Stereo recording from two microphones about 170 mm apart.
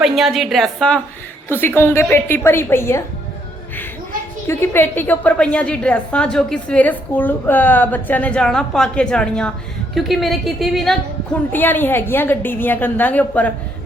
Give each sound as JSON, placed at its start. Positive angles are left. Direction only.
{"t": 0.0, "sound": "a woman's voice", "side_deg": 0}
{"t": 4.4, "sound": "a woman's voice", "side_deg": 15}
{"t": 11.5, "sound": "a woman's voice", "side_deg": 10}